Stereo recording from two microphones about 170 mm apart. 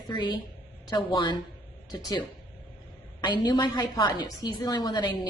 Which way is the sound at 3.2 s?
25° left (ahead or behind).